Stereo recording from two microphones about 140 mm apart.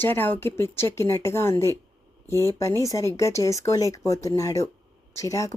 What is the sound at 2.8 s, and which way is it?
Speech, 20° left (ahead or behind).